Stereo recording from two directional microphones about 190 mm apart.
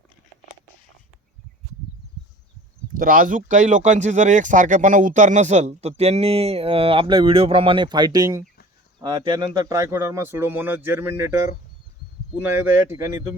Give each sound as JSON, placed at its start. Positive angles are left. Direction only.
{"t": 2.9, "sound": "a man's voice", "side_deg": -45}
{"t": 12.4, "sound": "a man's voice", "side_deg": -10}